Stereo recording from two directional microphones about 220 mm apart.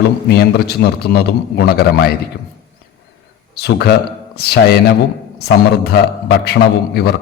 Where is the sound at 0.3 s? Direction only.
45° left (ahead or behind).